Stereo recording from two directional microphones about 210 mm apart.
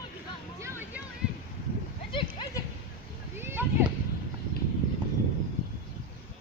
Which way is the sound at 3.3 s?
10° right (ahead or behind).